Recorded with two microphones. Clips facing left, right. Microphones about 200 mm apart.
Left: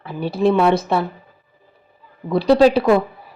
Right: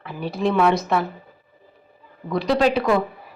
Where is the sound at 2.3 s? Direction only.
30° left (ahead or behind).